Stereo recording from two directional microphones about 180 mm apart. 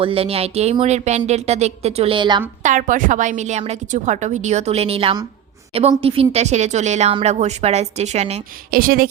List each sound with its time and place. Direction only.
0.0 s speech: 30° right (ahead or behind)
2.6 s speech: 45° right (ahead or behind)
8.7 s a woman's voice: 55° right (ahead or behind)